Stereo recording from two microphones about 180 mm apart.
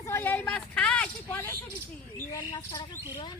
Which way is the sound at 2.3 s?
25° left (ahead or behind).